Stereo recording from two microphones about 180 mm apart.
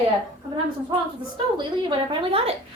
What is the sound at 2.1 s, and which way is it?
Speech, 30° right (ahead or behind).